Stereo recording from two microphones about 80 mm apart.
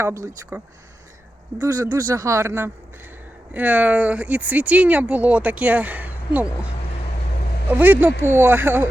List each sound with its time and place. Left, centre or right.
0.0 s speech: right
1.6 s speech: right
3.5 s speech: centre
7.7 s speech: right